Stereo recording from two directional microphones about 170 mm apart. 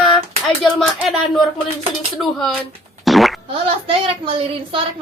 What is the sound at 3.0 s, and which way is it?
Fart, centre (ahead or behind).